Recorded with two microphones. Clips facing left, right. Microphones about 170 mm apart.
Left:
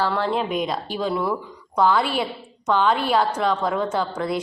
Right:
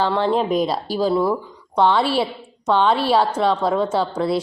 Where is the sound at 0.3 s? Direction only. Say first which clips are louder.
Right 5 dB; 35° right (ahead or behind).